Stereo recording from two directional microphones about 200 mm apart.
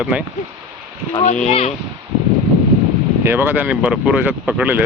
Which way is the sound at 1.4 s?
35° left (ahead or behind).